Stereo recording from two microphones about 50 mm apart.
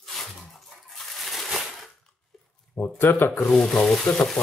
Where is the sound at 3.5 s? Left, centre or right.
Centre.